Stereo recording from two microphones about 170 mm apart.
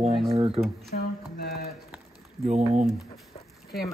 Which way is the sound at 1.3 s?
65° left (ahead or behind).